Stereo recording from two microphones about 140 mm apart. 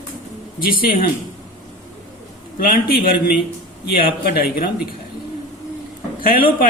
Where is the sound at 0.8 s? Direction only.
90° left.